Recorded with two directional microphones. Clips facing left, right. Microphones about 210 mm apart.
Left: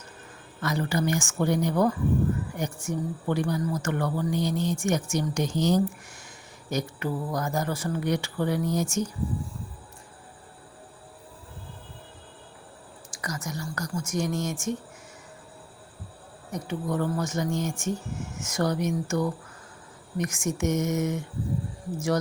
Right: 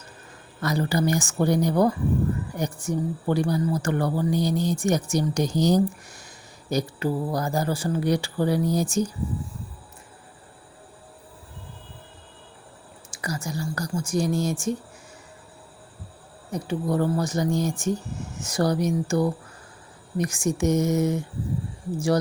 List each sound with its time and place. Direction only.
0.6 s speech: 35° right (ahead or behind)
13.1 s speech: 30° right (ahead or behind)
16.5 s speech: 30° right (ahead or behind)